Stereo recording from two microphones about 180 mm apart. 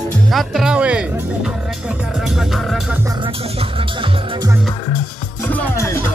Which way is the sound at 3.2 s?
30° right (ahead or behind).